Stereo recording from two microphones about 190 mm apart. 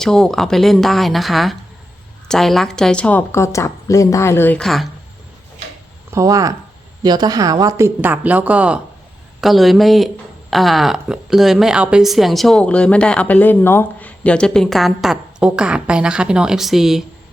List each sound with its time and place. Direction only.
0.0 s a woman's voice: 5° left (ahead or behind)
6.1 s a woman's voice: 15° right (ahead or behind)